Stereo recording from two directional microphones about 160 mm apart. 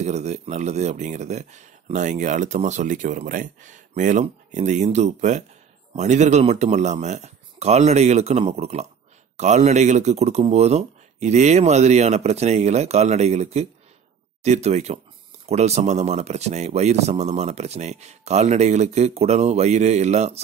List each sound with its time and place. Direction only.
0.0 s speech: 45° right (ahead or behind)